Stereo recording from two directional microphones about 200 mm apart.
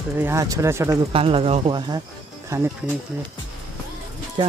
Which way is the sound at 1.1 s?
30° right (ahead or behind).